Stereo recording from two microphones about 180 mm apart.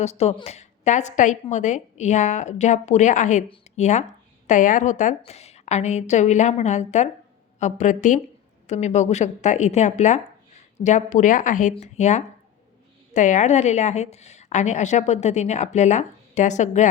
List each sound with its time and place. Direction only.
0.0 s a woman's voice: 35° left (ahead or behind)